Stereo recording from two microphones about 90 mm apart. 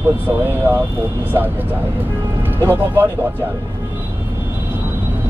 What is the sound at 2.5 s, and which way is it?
Speech, 25° right (ahead or behind).